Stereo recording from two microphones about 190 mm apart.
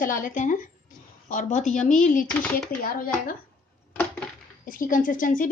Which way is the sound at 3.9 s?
10° left (ahead or behind).